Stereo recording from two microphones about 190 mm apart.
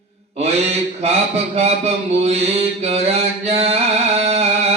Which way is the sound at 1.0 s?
35° right (ahead or behind).